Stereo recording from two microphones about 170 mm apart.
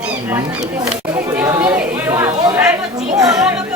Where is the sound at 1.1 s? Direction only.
20° right (ahead or behind).